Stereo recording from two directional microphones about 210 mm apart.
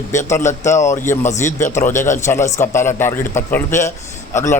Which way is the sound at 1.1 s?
10° left (ahead or behind).